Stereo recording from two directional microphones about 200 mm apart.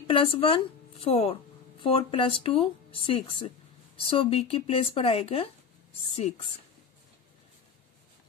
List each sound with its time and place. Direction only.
0.0 s a woman's voice: 25° left (ahead or behind)